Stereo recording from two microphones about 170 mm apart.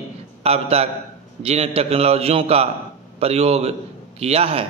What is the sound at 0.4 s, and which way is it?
A man's voice, 35° right (ahead or behind).